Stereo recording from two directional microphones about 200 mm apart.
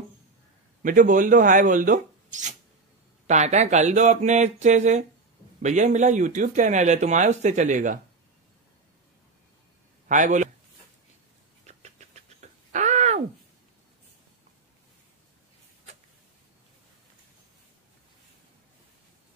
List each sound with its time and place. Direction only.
0.8 s speech: 40° right (ahead or behind)
10.0 s a man's voice: 40° right (ahead or behind)
11.6 s a sound: 35° right (ahead or behind)